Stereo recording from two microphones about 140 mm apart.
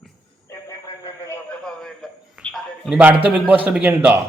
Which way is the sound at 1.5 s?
5° left (ahead or behind).